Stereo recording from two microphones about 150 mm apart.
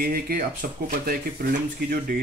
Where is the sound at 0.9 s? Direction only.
80° right.